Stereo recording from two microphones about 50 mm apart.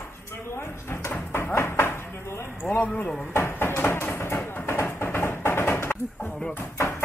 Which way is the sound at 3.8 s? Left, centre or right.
Left.